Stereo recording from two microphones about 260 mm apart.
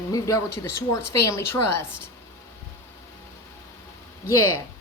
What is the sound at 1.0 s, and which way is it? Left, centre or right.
Speech, left.